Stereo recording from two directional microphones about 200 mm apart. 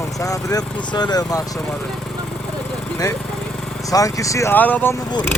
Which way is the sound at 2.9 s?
15° left (ahead or behind).